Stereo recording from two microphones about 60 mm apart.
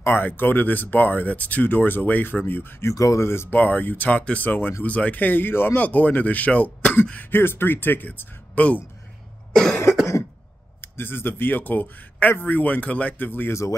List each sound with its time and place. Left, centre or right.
0.0 s speech: left
2.9 s speech: left
3.2 s speech: left
3.5 s speech: left
5.8 s speech: left
7.2 s speech: left
8.5 s speech: left
9.5 s cough: centre
10.8 s speech: left
13.5 s speech: left